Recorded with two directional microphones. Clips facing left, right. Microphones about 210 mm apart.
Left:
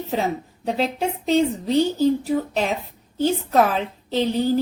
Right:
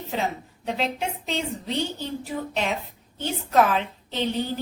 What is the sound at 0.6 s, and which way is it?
A woman's voice, 35° left (ahead or behind).